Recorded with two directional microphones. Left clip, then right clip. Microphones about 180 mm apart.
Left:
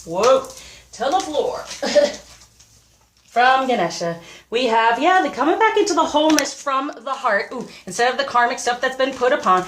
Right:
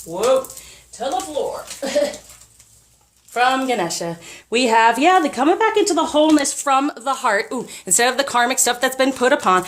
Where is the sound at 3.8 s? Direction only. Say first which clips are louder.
Left 2 dB; 60° right (ahead or behind); by 6.4 s 35° right (ahead or behind).